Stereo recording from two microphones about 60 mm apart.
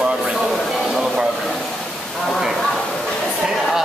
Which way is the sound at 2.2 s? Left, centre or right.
Centre.